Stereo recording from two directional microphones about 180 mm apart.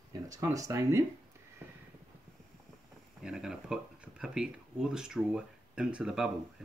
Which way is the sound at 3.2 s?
5° right (ahead or behind).